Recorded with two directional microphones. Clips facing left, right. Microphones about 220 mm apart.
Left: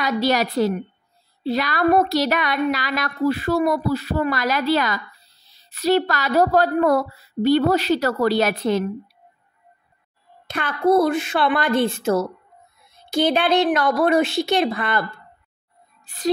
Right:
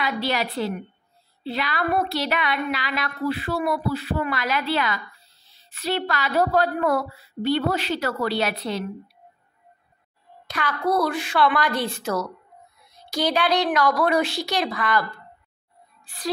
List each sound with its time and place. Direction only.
0.0 s a woman's voice: 45° left (ahead or behind)
10.4 s a woman's voice: 25° left (ahead or behind)